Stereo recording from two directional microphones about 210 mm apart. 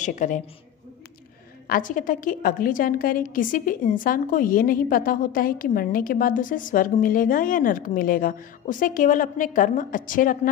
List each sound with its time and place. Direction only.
0.0 s a woman's voice: 40° left (ahead or behind)
1.7 s a woman's voice: 40° left (ahead or behind)